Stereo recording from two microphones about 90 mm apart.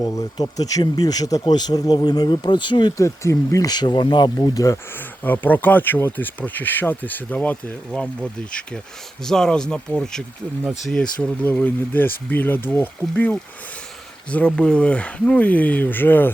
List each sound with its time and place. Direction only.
0.0 s speech: 40° left (ahead or behind); by 2.9 s 60° left (ahead or behind)
3.0 s speech: 35° left (ahead or behind)
3.7 s speech: 55° left (ahead or behind)
4.4 s speech: 40° left (ahead or behind)
4.9 s speech: 20° left (ahead or behind)
9.2 s speech: 5° left (ahead or behind); by 16.3 s 20° left (ahead or behind)